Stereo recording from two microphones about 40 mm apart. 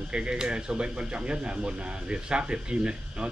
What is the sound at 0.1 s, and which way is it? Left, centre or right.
Speech, right.